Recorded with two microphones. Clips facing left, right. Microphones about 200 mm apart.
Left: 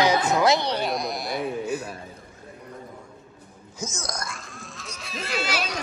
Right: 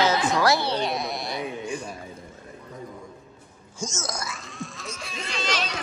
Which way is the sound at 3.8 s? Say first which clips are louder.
Right 1 dB; centre (ahead or behind).